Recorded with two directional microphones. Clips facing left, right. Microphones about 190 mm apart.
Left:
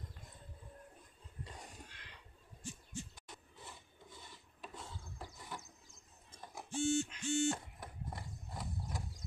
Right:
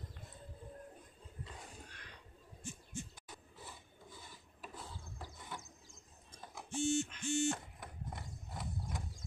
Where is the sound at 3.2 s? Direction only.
Centre (ahead or behind).